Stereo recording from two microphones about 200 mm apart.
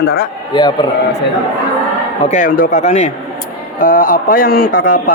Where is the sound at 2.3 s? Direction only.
40° left (ahead or behind).